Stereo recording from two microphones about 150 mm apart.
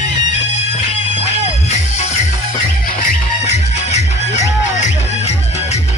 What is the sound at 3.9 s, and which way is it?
Music, 50° left (ahead or behind).